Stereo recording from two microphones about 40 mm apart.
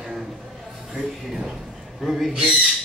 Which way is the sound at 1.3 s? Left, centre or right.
Centre.